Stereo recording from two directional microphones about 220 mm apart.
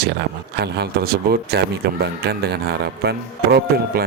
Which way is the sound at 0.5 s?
50° right (ahead or behind).